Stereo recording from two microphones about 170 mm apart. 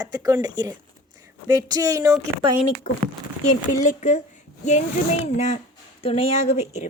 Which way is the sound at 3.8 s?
45° left (ahead or behind).